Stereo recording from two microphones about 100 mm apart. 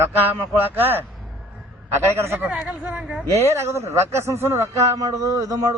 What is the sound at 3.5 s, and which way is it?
A man's voice, 25° right (ahead or behind).